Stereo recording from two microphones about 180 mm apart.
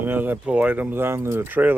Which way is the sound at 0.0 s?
10° right (ahead or behind).